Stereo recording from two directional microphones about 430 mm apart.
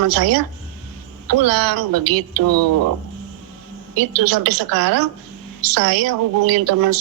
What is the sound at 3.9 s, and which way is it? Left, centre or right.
A woman's voice, right.